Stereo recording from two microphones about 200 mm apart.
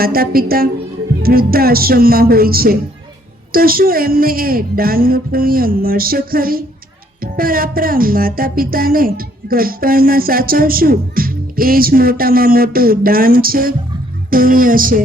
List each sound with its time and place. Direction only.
0.0 s music: 45° right (ahead or behind)